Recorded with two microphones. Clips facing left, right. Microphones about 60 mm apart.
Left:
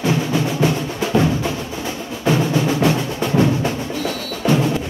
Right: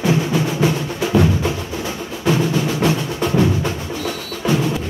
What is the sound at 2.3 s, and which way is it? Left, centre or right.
Music, centre.